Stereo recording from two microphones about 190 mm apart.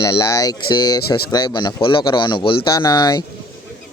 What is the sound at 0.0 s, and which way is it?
Speech, 20° left (ahead or behind).